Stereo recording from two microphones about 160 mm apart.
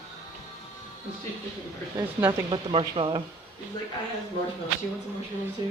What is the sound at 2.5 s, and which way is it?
Speech, 35° right (ahead or behind).